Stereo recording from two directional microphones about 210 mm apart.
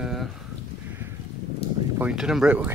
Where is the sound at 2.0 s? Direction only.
5° right (ahead or behind).